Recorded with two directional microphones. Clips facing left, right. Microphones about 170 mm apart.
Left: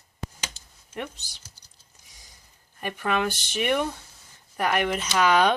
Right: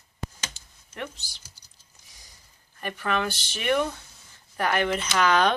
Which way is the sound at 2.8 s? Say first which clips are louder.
Left 2 dB; 15° left (ahead or behind).